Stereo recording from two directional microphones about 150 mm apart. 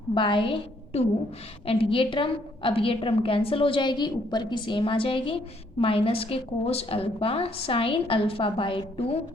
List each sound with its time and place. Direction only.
0.1 s a woman's voice: 35° left (ahead or behind)